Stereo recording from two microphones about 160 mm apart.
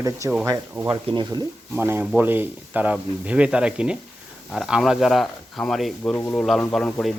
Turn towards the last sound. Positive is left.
turn(degrees=5)  # may be behind; listen again after turning